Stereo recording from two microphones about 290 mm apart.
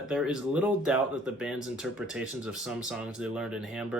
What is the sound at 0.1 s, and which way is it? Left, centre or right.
Speech, centre.